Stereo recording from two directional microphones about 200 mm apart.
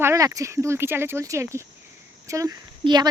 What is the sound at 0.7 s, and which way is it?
Speech, 10° right (ahead or behind).